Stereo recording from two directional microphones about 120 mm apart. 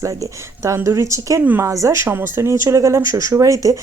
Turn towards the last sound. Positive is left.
turn(degrees=-30)  # may be behind; listen again after turning